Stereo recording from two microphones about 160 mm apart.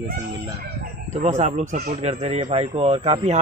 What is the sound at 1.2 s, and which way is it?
A man's voice, 45° right (ahead or behind).